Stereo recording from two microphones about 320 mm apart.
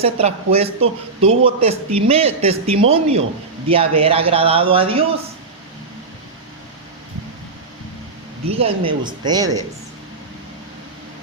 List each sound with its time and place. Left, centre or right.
0.0 s a man's voice: centre
8.5 s a man's voice: centre